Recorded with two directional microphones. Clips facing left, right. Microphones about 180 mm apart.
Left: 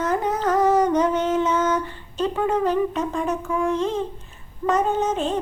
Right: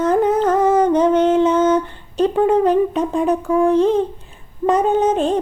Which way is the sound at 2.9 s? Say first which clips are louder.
Right 7 dB; 35° right (ahead or behind).